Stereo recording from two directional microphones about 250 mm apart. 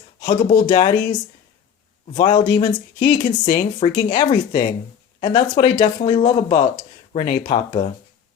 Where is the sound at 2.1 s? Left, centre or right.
Centre.